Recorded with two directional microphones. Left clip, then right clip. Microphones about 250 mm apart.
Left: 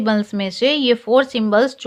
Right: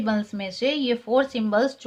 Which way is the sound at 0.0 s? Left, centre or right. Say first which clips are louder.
Left 7 dB; left.